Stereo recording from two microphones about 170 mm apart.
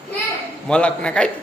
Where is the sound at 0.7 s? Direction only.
5° left (ahead or behind).